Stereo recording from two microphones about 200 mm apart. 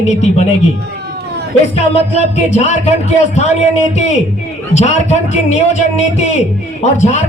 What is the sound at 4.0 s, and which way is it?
A man's voice, 35° left (ahead or behind).